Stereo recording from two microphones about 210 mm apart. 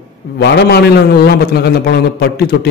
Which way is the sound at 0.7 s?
50° left (ahead or behind).